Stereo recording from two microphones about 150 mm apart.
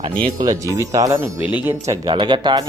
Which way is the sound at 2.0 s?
30° right (ahead or behind).